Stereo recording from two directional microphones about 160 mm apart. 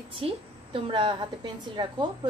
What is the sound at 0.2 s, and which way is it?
A woman's voice, 35° right (ahead or behind).